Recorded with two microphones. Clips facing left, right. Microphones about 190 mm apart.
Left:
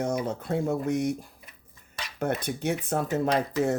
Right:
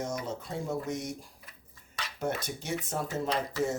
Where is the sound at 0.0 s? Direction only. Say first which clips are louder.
Left 6 dB; 60° left (ahead or behind).